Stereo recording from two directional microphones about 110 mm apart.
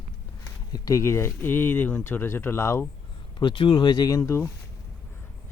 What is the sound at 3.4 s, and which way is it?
Speech, 50° left (ahead or behind).